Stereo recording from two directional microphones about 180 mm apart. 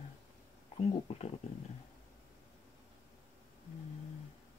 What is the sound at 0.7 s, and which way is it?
Speech, 35° left (ahead or behind).